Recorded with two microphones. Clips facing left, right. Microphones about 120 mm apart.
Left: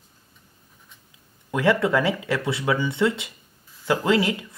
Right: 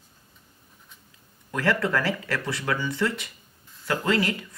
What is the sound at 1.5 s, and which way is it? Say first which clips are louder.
Speech: left 4 dB; 20° left (ahead or behind).